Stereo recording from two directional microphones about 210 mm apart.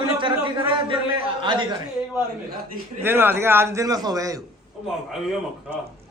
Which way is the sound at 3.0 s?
10° right (ahead or behind).